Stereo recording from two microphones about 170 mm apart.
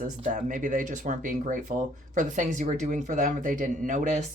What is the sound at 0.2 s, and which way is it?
Speech, 50° right (ahead or behind).